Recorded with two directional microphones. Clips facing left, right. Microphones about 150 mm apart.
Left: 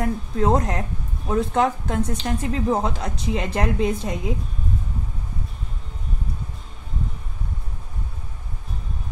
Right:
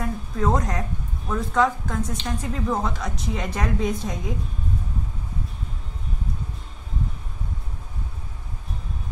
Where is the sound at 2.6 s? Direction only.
30° left (ahead or behind).